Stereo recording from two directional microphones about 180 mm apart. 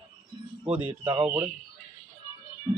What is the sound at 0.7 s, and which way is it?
Speech, 10° right (ahead or behind).